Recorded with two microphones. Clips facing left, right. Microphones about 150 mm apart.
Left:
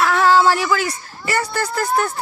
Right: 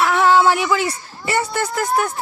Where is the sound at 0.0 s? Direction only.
20° right (ahead or behind).